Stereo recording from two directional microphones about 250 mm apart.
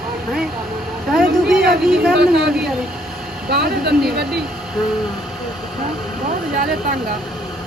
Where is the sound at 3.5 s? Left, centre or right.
Right.